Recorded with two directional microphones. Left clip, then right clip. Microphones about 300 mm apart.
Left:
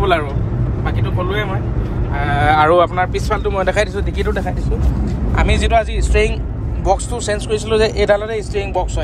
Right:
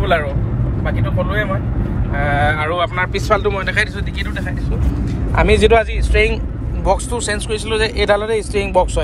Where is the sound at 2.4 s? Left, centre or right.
Left.